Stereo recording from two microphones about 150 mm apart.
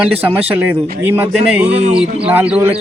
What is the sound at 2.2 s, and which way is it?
Speech, 10° right (ahead or behind).